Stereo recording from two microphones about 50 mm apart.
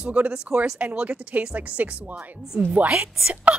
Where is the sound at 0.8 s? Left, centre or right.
Right.